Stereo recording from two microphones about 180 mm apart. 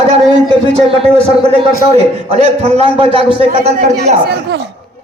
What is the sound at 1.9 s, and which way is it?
A man's voice, 35° right (ahead or behind).